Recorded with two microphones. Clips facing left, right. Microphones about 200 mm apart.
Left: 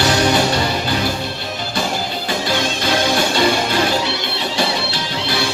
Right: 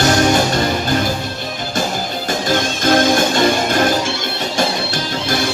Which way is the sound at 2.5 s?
45° right (ahead or behind).